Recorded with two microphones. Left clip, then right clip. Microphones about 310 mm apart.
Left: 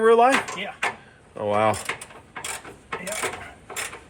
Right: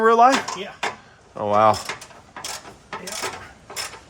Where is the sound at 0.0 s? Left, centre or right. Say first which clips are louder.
Right 2 dB; right.